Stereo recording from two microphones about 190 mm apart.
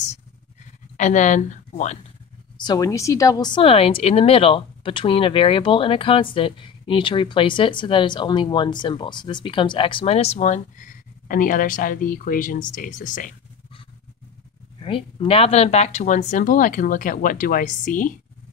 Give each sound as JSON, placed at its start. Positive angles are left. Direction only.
{"t": 0.9, "sound": "speech", "side_deg": 40}
{"t": 2.6, "sound": "a woman's voice", "side_deg": 20}
{"t": 14.8, "sound": "speech", "side_deg": 30}